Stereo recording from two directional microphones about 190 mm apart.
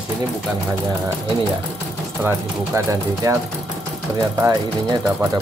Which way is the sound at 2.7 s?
15° right (ahead or behind).